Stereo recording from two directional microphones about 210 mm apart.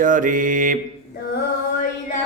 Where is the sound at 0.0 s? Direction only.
40° right (ahead or behind).